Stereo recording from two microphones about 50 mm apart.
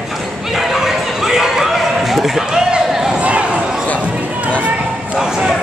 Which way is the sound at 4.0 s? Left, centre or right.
Right.